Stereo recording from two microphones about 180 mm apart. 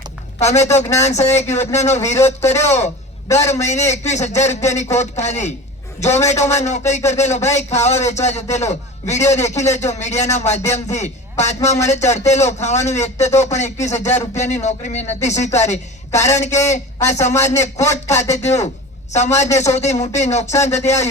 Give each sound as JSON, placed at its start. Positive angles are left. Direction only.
{"t": 0.3, "sound": "a man's voice", "side_deg": 40}
{"t": 3.2, "sound": "a man's voice", "side_deg": 15}
{"t": 3.5, "sound": "a man's voice", "side_deg": 40}